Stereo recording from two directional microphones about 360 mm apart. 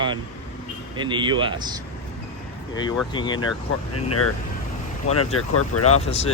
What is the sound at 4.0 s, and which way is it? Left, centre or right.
Speech, left.